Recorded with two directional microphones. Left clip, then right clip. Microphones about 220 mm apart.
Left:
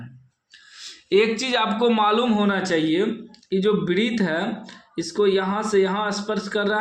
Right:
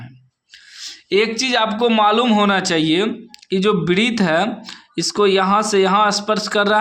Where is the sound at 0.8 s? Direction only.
20° right (ahead or behind).